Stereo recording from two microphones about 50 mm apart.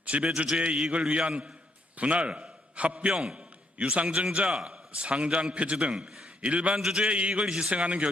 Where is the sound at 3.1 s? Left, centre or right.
Centre.